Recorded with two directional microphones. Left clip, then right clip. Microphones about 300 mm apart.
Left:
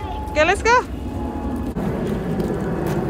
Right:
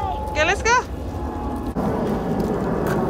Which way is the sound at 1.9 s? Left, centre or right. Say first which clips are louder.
Right 2 dB; right.